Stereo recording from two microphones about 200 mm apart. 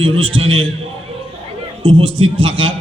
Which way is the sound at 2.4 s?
25° right (ahead or behind).